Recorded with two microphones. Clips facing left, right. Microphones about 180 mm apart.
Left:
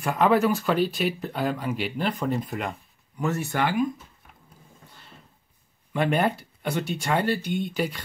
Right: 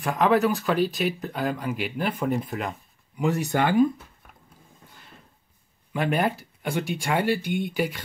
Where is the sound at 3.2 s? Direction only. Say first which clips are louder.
Right 2 dB; 15° right (ahead or behind).